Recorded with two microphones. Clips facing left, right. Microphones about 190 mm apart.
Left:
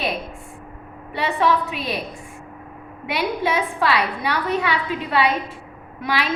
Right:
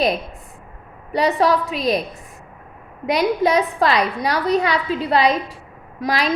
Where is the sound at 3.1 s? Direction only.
40° right (ahead or behind).